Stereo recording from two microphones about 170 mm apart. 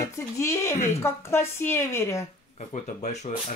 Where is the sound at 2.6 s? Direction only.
45° left (ahead or behind).